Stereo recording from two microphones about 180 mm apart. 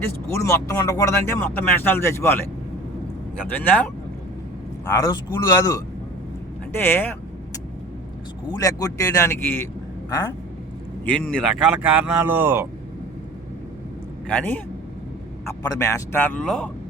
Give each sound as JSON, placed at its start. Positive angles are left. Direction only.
{"t": 0.3, "sound": "speech", "side_deg": 15}
{"t": 3.5, "sound": "speech", "side_deg": 10}
{"t": 4.9, "sound": "speech", "side_deg": 20}
{"t": 8.4, "sound": "speech", "side_deg": 20}
{"t": 11.0, "sound": "speech", "side_deg": 5}
{"t": 11.6, "sound": "speech", "side_deg": -10}
{"t": 14.3, "sound": "speech", "side_deg": 5}
{"t": 15.7, "sound": "speech", "side_deg": 15}